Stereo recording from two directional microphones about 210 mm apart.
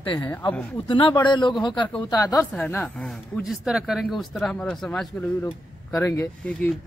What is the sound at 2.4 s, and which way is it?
Speech, 10° left (ahead or behind).